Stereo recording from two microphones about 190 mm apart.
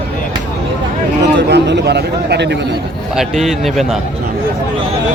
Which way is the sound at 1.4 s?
65° right (ahead or behind).